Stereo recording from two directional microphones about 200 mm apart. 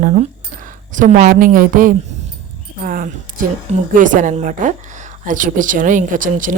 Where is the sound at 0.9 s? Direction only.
40° right (ahead or behind).